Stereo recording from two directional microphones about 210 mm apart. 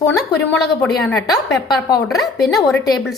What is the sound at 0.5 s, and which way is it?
Speech, 10° left (ahead or behind).